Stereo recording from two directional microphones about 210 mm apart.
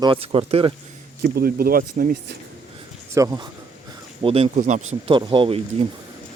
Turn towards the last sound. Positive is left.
turn(degrees=-25)  # may be behind; listen again after turning